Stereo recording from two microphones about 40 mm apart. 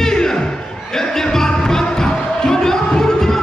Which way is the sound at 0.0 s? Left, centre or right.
Centre.